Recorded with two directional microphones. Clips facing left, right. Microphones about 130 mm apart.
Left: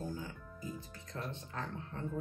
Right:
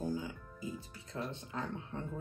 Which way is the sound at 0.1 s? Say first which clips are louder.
Right 5 dB; 15° right (ahead or behind).